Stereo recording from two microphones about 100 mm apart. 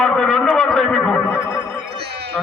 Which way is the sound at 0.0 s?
5° left (ahead or behind).